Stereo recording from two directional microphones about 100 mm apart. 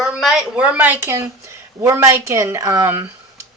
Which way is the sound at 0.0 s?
5° right (ahead or behind).